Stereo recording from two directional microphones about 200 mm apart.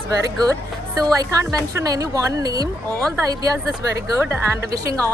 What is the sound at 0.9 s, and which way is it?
A woman's voice, 20° right (ahead or behind).